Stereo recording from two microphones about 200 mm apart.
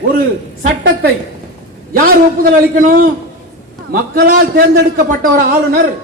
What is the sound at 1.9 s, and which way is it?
A man's voice, 45° right (ahead or behind).